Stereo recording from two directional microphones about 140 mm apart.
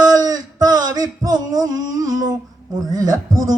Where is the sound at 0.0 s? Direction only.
25° right (ahead or behind).